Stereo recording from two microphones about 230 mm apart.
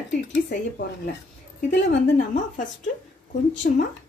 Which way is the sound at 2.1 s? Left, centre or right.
Left.